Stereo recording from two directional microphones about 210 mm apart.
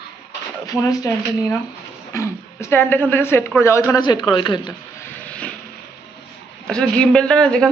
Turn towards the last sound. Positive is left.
turn(degrees=5)  # may be behind; listen again after turning